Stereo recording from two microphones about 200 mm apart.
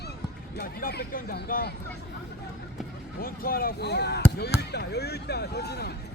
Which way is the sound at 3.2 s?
50° left (ahead or behind).